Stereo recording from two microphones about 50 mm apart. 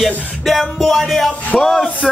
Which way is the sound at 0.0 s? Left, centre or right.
Centre.